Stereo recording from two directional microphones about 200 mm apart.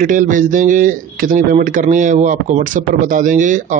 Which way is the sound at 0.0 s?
40° right (ahead or behind).